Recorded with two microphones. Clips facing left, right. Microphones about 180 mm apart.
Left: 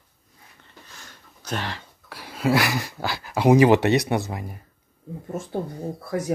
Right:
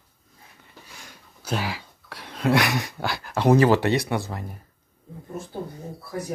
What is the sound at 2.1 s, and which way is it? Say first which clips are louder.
Speech: even; 5° left (ahead or behind).